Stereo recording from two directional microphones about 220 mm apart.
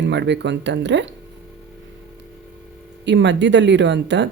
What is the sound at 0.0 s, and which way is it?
Speech, 55° right (ahead or behind).